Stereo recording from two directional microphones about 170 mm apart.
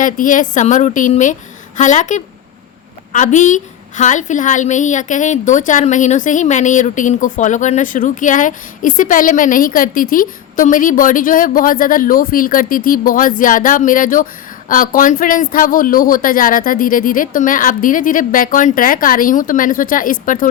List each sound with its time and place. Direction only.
0.0 s a woman's voice: 50° left (ahead or behind)